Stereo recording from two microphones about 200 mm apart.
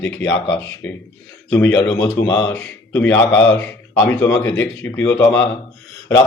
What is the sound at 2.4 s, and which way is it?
Speech, 10° left (ahead or behind).